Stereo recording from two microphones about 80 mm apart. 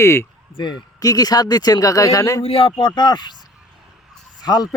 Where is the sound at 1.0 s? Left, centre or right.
Left.